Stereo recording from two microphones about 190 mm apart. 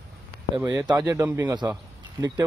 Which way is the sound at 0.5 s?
15° right (ahead or behind).